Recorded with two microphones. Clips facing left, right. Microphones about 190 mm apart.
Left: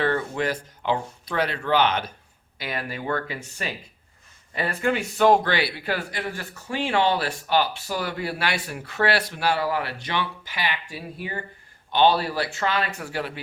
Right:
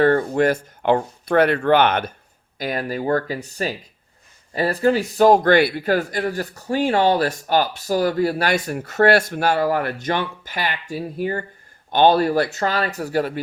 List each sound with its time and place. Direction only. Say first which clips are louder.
0.0 s speech: right 8 dB; 45° right (ahead or behind)
2.6 s speech: right 7 dB; 40° right (ahead or behind)